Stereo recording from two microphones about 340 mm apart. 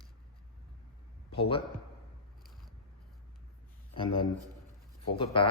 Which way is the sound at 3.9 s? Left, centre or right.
Centre.